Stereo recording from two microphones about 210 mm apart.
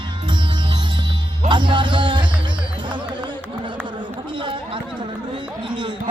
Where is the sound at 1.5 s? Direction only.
20° right (ahead or behind).